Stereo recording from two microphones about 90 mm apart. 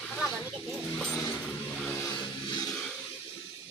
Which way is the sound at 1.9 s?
35° left (ahead or behind).